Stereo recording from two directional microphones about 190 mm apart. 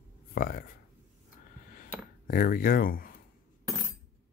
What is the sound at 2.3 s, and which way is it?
Speech, 50° left (ahead or behind).